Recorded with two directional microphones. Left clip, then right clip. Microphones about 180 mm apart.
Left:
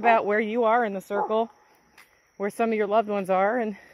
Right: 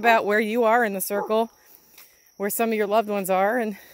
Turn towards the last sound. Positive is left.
turn(degrees=-35)  # may be behind; listen again after turning